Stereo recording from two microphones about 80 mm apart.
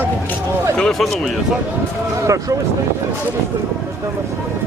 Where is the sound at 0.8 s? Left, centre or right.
Centre.